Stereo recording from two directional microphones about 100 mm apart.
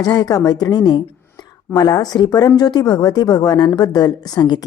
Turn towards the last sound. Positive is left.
turn(degrees=40)  # may be behind; listen again after turning